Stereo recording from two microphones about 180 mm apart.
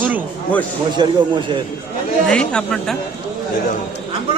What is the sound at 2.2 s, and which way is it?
Speech, 5° left (ahead or behind).